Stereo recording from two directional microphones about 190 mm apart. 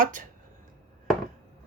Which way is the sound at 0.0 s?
45° right (ahead or behind).